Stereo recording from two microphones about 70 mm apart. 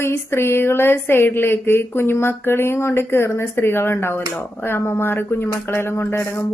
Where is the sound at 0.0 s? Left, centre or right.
Left.